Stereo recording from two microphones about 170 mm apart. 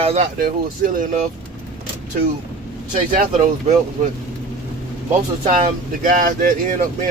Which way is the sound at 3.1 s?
50° right (ahead or behind).